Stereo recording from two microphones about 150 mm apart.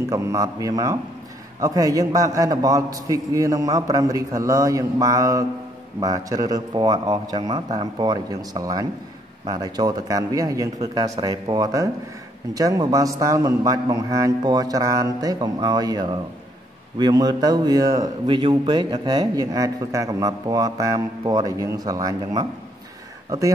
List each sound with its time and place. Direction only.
0.1 s speech: 20° right (ahead or behind)